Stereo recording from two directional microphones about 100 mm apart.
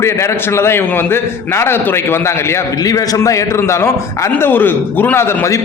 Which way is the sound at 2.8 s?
40° left (ahead or behind).